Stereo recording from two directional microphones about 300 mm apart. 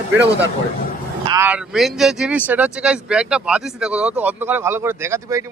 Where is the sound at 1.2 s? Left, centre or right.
Centre.